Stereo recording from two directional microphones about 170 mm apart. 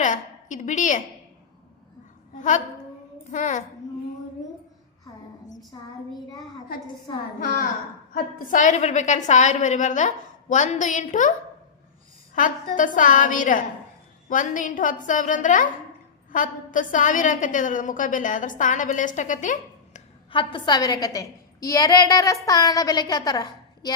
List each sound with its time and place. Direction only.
0.0 s a woman's voice: 45° left (ahead or behind)
2.3 s a woman's voice: 45° left (ahead or behind)
7.3 s a woman's voice: 50° left (ahead or behind)
20.3 s a woman's voice: 30° left (ahead or behind)